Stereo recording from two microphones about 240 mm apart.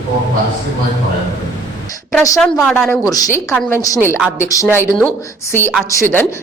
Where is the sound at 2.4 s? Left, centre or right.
Centre.